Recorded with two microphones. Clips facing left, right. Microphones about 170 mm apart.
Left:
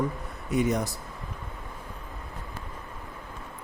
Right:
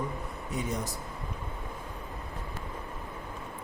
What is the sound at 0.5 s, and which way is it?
Speech, 75° left (ahead or behind).